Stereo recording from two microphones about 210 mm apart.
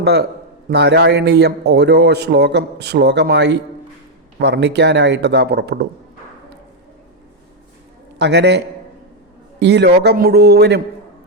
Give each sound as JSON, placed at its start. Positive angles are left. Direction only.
{"t": 0.0, "sound": "a man's voice", "side_deg": -50}
{"t": 8.2, "sound": "a man's voice", "side_deg": -55}